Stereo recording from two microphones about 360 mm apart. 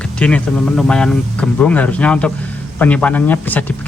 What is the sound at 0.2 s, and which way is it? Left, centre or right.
Speech, centre.